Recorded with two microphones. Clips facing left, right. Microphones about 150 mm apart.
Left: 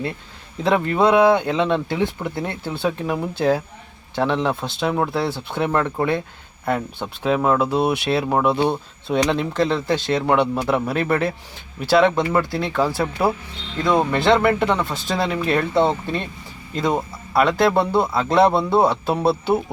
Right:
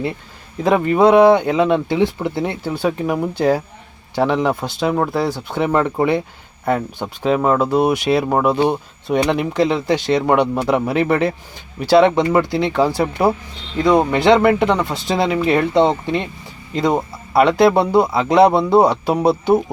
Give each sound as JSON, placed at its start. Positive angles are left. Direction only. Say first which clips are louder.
{"t": 0.6, "sound": "speech", "louder": "right 4 dB", "side_deg": -10}
{"t": 4.9, "sound": "speech", "louder": "right 2 dB", "side_deg": 0}
{"t": 5.3, "sound": "speech", "louder": "right 3 dB", "side_deg": -15}
{"t": 7.3, "sound": "speech", "louder": "right 3 dB", "side_deg": -5}
{"t": 17.3, "sound": "speech", "louder": "right 4 dB", "side_deg": -10}